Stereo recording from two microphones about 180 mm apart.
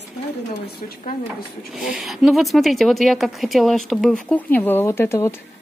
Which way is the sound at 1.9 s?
Centre (ahead or behind).